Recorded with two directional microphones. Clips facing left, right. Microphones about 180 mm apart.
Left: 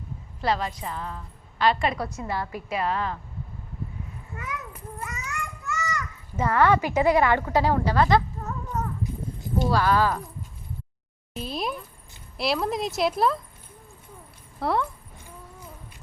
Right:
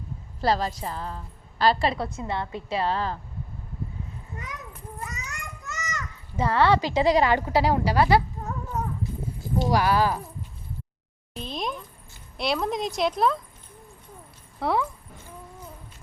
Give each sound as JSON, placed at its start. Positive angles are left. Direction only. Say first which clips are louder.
{"t": 0.4, "sound": "a woman's voice", "louder": "right 2 dB", "side_deg": -35}
{"t": 5.3, "sound": "children playing", "louder": "left 6 dB", "side_deg": -20}
{"t": 7.3, "sound": "speech", "louder": "even", "side_deg": -15}
{"t": 11.3, "sound": "speech", "louder": "left 1 dB", "side_deg": 5}
{"t": 14.6, "sound": "speech", "louder": "even", "side_deg": 0}